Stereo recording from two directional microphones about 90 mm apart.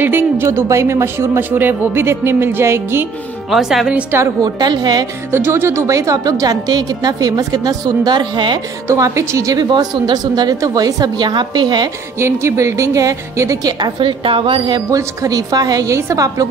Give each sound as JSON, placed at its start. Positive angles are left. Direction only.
{"t": 0.0, "sound": "speech", "side_deg": -25}
{"t": 3.4, "sound": "speech", "side_deg": -5}
{"t": 4.4, "sound": "a woman's voice", "side_deg": -50}
{"t": 5.3, "sound": "a woman's voice", "side_deg": -25}
{"t": 8.8, "sound": "a woman's voice", "side_deg": -35}
{"t": 9.6, "sound": "a woman's voice", "side_deg": -55}
{"t": 12.2, "sound": "a woman's voice", "side_deg": -30}
{"t": 13.7, "sound": "a woman's voice", "side_deg": -55}
{"t": 14.9, "sound": "a woman's voice", "side_deg": -40}